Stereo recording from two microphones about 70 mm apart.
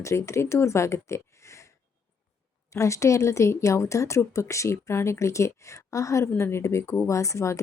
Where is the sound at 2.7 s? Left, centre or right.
Left.